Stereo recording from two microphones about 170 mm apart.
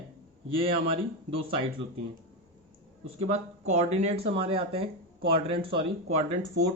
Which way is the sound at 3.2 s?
40° right (ahead or behind).